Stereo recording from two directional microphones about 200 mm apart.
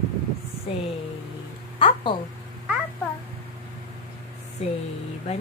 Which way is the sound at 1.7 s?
25° left (ahead or behind).